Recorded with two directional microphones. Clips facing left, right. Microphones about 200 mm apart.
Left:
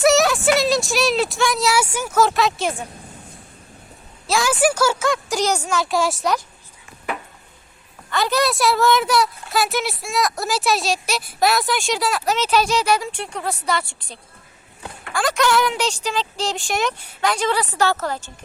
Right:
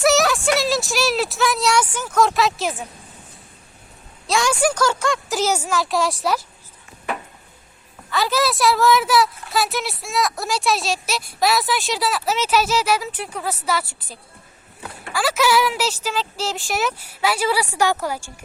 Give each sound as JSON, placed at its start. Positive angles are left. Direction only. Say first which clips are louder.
{"t": 0.0, "sound": "speech", "louder": "left 2 dB", "side_deg": 0}
{"t": 4.3, "sound": "a woman's voice", "louder": "left 1 dB", "side_deg": 5}
{"t": 8.1, "sound": "a woman's voice", "louder": "left 1 dB", "side_deg": 0}